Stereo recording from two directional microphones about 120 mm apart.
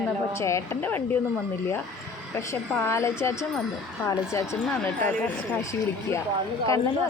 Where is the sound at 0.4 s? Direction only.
25° left (ahead or behind).